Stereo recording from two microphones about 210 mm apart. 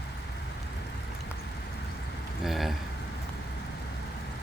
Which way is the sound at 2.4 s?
Centre (ahead or behind).